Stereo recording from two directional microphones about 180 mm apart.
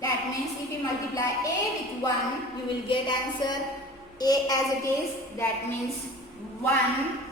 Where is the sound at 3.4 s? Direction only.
25° left (ahead or behind).